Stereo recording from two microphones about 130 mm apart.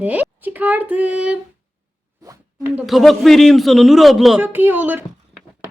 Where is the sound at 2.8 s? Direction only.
Centre (ahead or behind).